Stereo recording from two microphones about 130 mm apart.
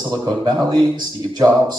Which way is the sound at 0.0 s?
35° right (ahead or behind).